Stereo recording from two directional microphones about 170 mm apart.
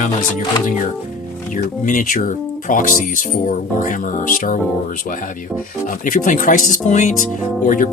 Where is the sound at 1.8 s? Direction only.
50° left (ahead or behind).